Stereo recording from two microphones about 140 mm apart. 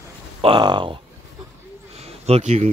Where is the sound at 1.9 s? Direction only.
50° right (ahead or behind).